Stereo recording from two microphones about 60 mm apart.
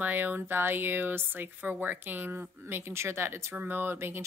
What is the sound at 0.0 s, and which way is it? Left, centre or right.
Speech, right.